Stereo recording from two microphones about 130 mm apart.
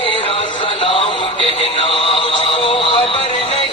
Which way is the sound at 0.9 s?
45° left (ahead or behind).